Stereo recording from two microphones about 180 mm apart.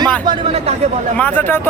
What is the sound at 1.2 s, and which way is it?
Speech, 10° left (ahead or behind).